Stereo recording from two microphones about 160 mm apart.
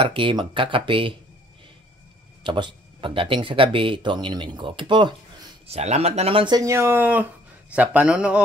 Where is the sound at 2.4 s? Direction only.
30° right (ahead or behind).